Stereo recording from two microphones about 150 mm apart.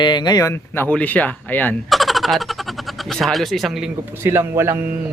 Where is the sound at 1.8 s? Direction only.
Centre (ahead or behind).